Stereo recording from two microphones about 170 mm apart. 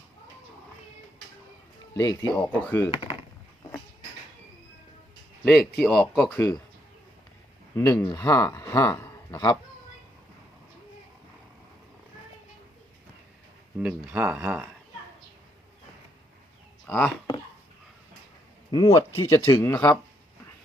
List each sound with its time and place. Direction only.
2.0 s speech: 25° left (ahead or behind)
2.3 s speech: 10° left (ahead or behind)
5.5 s speech: centre (ahead or behind)
6.3 s speech: 15° left (ahead or behind)
7.8 s speech: 20° left (ahead or behind)
13.7 s speech: 5° right (ahead or behind)
16.8 s speech: 10° left (ahead or behind)
18.7 s speech: 20° left (ahead or behind)